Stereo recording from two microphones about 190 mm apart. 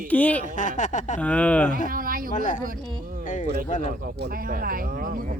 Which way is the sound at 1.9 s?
50° right (ahead or behind).